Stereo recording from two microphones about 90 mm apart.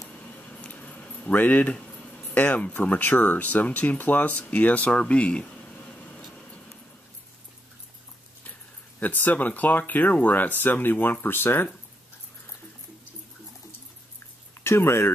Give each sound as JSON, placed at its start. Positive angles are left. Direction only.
{"t": 0.1, "sound": "speech", "side_deg": 15}
{"t": 9.0, "sound": "speech", "side_deg": 20}
{"t": 14.6, "sound": "speech", "side_deg": 25}